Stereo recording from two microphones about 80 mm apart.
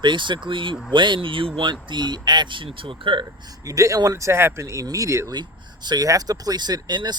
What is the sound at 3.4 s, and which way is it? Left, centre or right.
Speech, right.